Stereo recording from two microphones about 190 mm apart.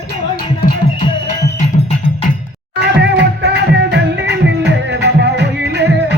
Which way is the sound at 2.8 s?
65° right (ahead or behind).